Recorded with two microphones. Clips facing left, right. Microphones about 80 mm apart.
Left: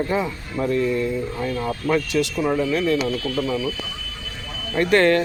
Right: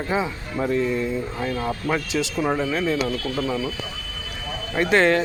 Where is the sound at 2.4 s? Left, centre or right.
Right.